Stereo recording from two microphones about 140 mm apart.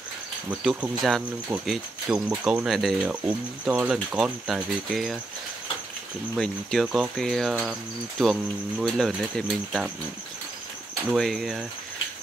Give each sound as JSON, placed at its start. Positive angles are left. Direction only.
{"t": 0.5, "sound": "speech", "side_deg": -10}
{"t": 3.1, "sound": "speech", "side_deg": -10}
{"t": 6.3, "sound": "speech", "side_deg": 0}
{"t": 11.1, "sound": "speech", "side_deg": 0}